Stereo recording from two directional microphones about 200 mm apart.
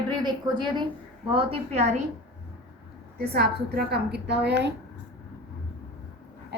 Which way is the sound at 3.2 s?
50° right (ahead or behind).